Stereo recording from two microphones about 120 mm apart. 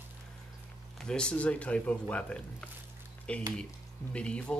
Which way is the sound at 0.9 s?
5° left (ahead or behind).